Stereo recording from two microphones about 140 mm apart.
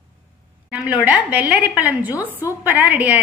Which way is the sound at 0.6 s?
10° right (ahead or behind).